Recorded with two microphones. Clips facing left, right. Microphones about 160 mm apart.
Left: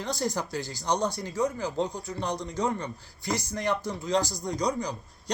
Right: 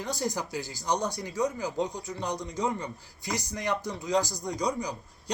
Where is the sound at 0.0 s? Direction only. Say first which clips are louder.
Left 1 dB; 10° right (ahead or behind).